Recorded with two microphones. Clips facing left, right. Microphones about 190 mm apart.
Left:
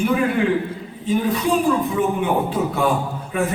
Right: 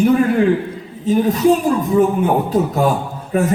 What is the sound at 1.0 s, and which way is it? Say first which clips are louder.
A man's voice: right 6 dB; 40° right (ahead or behind).